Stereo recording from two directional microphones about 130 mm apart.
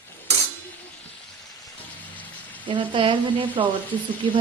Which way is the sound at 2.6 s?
40° right (ahead or behind).